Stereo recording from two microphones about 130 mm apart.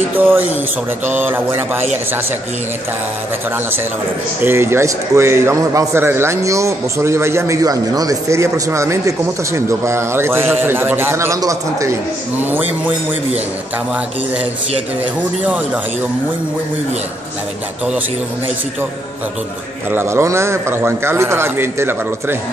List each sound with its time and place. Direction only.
0.1 s mantra: 15° right (ahead or behind)
4.4 s a man's voice: 20° right (ahead or behind)
15.4 s mantra: 10° right (ahead or behind)
19.9 s a man's voice: 20° right (ahead or behind)